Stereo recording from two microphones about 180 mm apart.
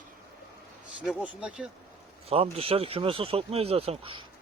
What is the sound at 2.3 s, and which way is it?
Speech, 30° right (ahead or behind).